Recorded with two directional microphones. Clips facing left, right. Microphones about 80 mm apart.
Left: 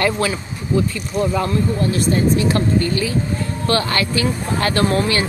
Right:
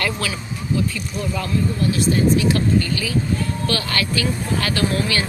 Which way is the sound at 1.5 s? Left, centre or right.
Left.